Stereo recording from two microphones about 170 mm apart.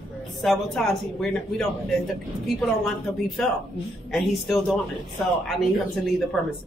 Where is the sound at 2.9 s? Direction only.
Centre (ahead or behind).